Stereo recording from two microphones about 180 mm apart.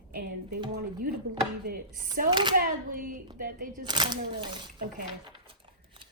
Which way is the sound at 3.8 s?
25° right (ahead or behind).